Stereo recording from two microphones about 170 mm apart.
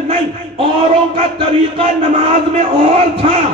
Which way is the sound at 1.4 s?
35° right (ahead or behind).